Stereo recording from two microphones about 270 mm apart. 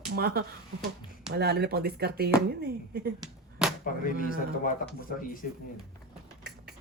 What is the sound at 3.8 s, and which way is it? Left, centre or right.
Speech, left.